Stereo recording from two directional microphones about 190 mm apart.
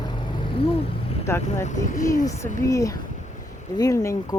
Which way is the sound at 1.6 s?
40° left (ahead or behind).